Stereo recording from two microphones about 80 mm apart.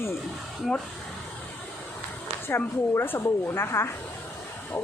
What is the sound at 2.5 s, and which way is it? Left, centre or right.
A woman's voice, left.